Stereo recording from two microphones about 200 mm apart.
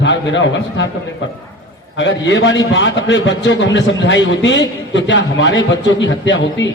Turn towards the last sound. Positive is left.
turn(degrees=65)  # may be behind; listen again after turning